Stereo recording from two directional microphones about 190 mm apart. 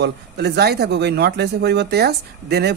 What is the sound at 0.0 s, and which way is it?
Speech, 60° right (ahead or behind).